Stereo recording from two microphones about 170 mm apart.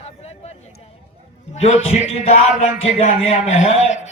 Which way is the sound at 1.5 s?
40° left (ahead or behind).